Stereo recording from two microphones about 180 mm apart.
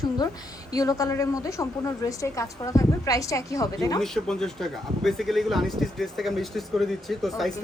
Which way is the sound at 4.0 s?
Centre (ahead or behind).